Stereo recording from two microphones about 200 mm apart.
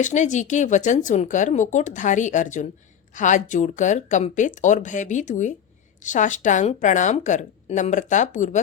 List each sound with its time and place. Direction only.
0.0 s speech: 35° left (ahead or behind)